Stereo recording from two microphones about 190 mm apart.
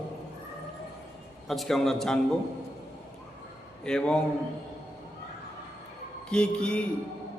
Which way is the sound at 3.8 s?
5° left (ahead or behind).